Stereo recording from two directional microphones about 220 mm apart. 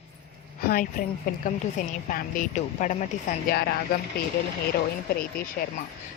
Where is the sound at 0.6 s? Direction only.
40° left (ahead or behind).